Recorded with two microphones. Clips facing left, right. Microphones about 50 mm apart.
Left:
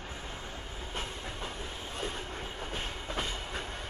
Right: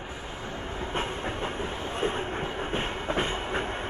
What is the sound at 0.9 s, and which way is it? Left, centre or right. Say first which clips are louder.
Train: right 8 dB; right.